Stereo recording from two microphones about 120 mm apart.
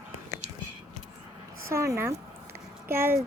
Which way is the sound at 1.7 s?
25° right (ahead or behind).